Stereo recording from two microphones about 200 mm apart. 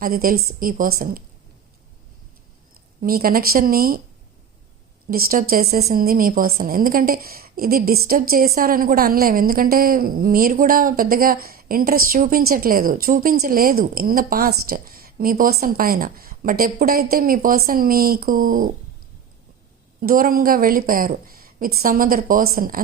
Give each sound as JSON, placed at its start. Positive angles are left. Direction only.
{"t": 0.0, "sound": "a woman's voice", "side_deg": -45}
{"t": 3.0, "sound": "a woman's voice", "side_deg": -45}
{"t": 5.1, "sound": "a woman's voice", "side_deg": -45}
{"t": 20.0, "sound": "a woman's voice", "side_deg": -45}